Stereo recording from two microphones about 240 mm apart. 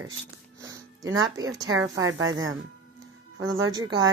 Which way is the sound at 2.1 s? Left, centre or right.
Right.